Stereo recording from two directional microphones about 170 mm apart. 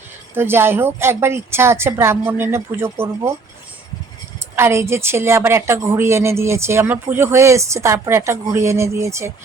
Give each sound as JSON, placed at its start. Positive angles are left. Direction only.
{"t": 0.3, "sound": "a woman's voice", "side_deg": -15}
{"t": 4.5, "sound": "a woman's voice", "side_deg": -15}